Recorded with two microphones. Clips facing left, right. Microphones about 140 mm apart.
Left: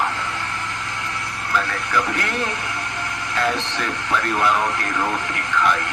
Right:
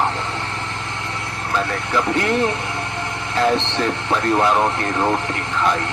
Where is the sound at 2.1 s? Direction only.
25° right (ahead or behind).